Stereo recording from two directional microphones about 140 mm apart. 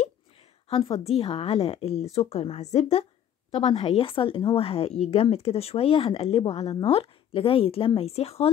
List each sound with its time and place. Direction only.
0.7 s a woman's voice: 40° left (ahead or behind)